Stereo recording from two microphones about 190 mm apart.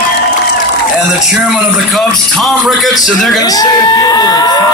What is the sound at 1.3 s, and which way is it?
A man's voice, 5° right (ahead or behind).